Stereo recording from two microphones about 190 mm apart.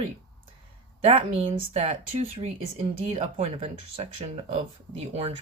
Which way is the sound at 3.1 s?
30° right (ahead or behind).